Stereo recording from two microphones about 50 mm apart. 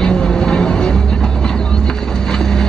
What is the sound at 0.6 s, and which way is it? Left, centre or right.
Music, centre.